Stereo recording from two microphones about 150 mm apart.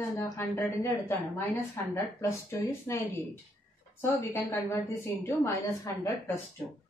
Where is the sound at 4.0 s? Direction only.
15° left (ahead or behind).